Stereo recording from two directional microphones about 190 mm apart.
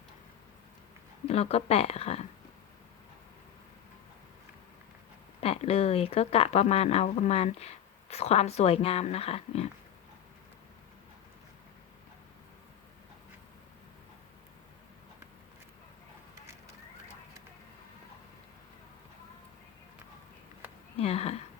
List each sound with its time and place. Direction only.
1.3 s speech: 35° left (ahead or behind)
5.4 s speech: 30° left (ahead or behind)
21.0 s speech: 30° left (ahead or behind)